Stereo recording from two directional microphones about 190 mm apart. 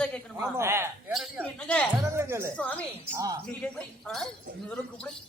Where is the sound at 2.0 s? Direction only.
15° right (ahead or behind).